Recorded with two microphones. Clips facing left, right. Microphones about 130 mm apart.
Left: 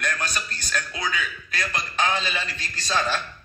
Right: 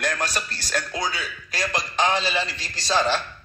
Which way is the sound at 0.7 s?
40° right (ahead or behind).